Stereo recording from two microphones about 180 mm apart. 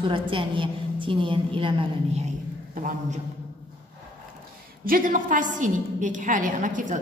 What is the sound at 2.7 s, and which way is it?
Speech, 50° right (ahead or behind).